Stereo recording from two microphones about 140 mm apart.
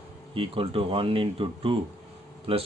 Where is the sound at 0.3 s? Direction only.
40° right (ahead or behind).